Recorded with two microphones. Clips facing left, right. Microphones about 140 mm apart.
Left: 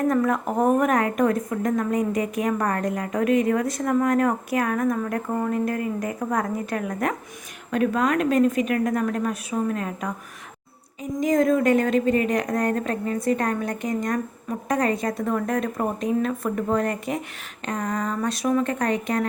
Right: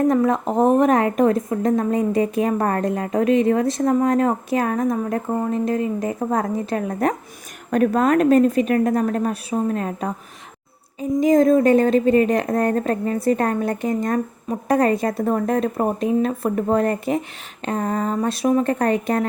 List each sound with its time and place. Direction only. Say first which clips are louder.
0.1 s a woman's voice: right 4 dB; 25° right (ahead or behind)
11.2 s a woman's voice: right 5 dB; 35° right (ahead or behind)